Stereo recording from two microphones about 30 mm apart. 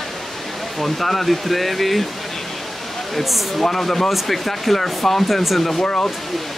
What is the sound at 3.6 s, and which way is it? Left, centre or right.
Speech, centre.